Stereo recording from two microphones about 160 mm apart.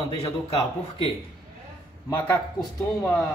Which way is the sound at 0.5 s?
35° left (ahead or behind).